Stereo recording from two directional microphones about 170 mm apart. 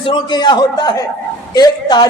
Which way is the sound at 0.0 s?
25° left (ahead or behind).